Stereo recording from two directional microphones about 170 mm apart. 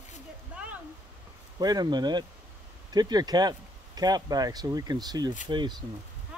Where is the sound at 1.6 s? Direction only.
25° right (ahead or behind).